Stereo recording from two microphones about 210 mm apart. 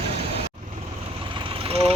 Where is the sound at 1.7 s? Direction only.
25° right (ahead or behind).